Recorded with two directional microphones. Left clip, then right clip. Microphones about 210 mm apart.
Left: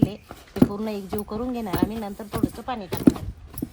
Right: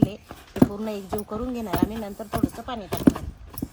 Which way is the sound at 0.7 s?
15° left (ahead or behind).